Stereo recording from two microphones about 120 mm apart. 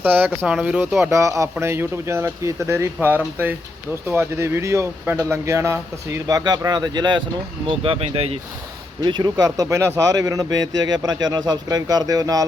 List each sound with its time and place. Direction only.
0.0 s speech: 15° right (ahead or behind)
0.9 s speech: 25° right (ahead or behind)
7.7 s speech: 50° right (ahead or behind)
9.0 s speech: 35° right (ahead or behind)